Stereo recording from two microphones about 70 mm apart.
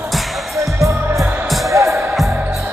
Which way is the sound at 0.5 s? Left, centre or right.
Right.